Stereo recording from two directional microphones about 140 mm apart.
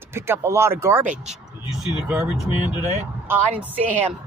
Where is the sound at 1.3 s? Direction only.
5° right (ahead or behind).